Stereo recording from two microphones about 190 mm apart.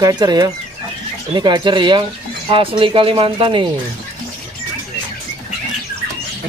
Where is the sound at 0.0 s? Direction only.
20° right (ahead or behind).